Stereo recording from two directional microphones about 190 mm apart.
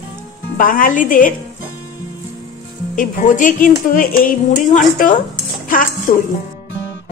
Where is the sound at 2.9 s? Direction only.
45° left (ahead or behind).